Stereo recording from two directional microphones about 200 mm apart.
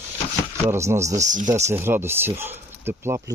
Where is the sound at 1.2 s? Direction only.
40° right (ahead or behind).